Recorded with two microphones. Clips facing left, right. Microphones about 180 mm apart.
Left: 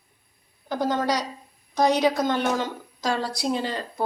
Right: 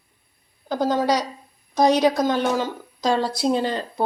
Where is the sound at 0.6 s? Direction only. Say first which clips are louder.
Right 3 dB; 10° right (ahead or behind).